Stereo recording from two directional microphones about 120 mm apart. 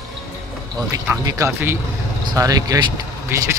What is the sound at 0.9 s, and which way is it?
Speech, 30° right (ahead or behind).